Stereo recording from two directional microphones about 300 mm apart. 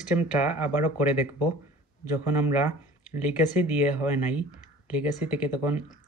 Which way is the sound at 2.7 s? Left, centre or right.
Left.